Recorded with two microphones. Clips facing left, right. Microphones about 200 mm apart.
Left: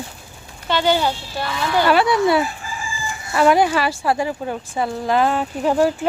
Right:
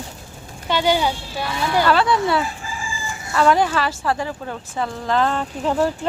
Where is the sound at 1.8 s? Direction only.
15° left (ahead or behind).